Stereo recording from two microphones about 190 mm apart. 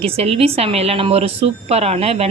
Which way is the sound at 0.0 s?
30° right (ahead or behind).